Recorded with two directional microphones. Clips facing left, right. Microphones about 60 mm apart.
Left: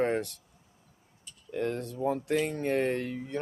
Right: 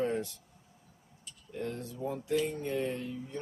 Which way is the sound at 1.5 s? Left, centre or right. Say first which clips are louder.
Left 6 dB; left.